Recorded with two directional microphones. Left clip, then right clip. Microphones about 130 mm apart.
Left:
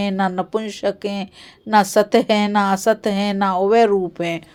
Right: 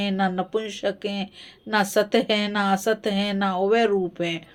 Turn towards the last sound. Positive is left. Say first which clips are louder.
# left 5 dB
turn(degrees=50)  # may be behind; listen again after turning